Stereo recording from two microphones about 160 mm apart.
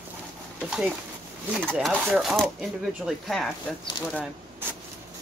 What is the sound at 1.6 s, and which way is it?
Speech, 5° left (ahead or behind).